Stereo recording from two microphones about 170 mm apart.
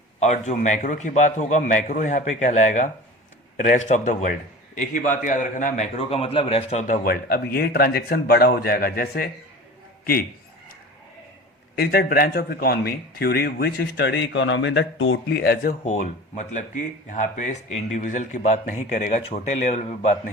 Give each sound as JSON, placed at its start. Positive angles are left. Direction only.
{"t": 0.2, "sound": "a man's voice", "side_deg": 45}
{"t": 11.8, "sound": "speech", "side_deg": 65}
{"t": 15.8, "sound": "a man's voice", "side_deg": 45}